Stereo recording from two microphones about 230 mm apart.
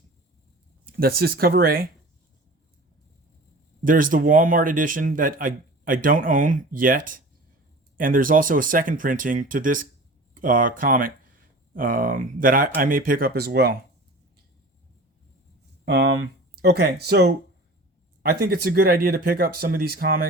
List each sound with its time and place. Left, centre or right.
0.9 s speech: right
3.8 s speech: right
15.8 s speech: right